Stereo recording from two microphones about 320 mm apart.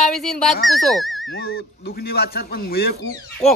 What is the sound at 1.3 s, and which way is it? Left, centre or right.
Speech, left.